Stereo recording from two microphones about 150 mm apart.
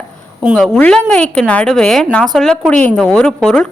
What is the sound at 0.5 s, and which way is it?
A woman's voice, 5° left (ahead or behind).